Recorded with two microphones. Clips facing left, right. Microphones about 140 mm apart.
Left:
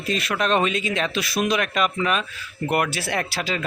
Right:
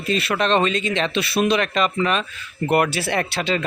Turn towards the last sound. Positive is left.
turn(degrees=5)  # may be behind; listen again after turning